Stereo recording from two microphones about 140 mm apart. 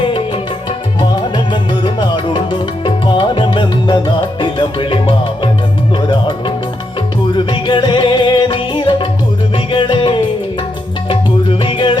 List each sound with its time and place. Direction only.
0.9 s music: 30° left (ahead or behind)